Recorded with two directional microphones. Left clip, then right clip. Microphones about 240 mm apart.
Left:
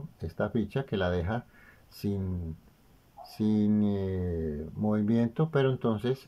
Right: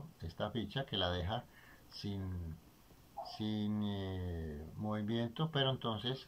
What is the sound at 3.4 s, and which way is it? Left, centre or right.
Speech, left.